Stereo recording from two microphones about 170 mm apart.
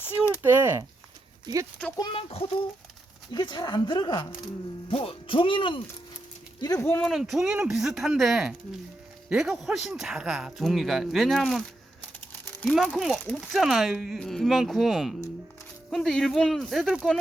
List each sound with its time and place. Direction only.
0.4 s speech: 15° right (ahead or behind)
2.0 s a child's voice: 35° left (ahead or behind); by 7.0 s 15° left (ahead or behind)
7.0 s speech: centre (ahead or behind)